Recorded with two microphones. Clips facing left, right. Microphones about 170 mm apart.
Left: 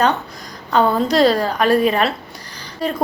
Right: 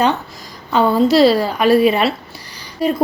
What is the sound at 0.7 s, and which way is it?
A woman's voice, 5° right (ahead or behind).